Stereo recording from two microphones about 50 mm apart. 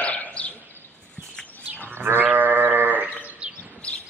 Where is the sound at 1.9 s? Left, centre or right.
Right.